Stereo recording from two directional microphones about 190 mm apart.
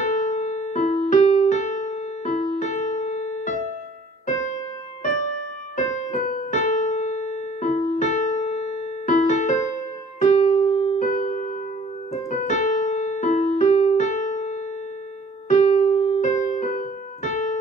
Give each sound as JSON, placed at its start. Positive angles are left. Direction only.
{"t": 0.0, "sound": "music", "side_deg": 40}
{"t": 5.9, "sound": "keyboard", "side_deg": 40}
{"t": 15.4, "sound": "music", "side_deg": 40}